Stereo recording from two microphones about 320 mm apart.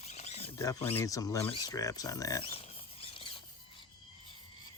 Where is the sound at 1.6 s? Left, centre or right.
Centre.